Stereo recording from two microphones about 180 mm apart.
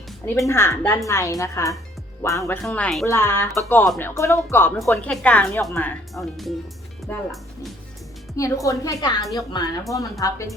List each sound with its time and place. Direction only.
0.4 s speech: 15° left (ahead or behind)
8.4 s a woman's voice: 15° left (ahead or behind)